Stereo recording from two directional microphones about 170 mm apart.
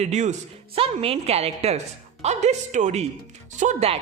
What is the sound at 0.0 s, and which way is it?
A woman's voice, 45° right (ahead or behind).